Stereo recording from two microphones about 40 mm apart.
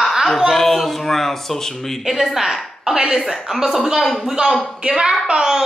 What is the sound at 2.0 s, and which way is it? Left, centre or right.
A woman's voice, centre.